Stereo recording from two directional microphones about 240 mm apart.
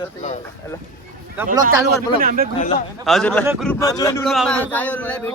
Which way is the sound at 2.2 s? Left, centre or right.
Right.